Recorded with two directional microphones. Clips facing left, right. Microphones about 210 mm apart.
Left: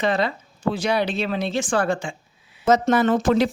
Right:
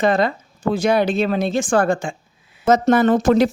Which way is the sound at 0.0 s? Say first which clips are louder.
Right 5 dB; 50° right (ahead or behind).